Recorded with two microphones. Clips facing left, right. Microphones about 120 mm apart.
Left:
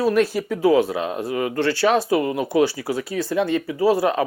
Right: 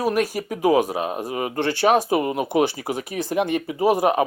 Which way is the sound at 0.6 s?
15° right (ahead or behind).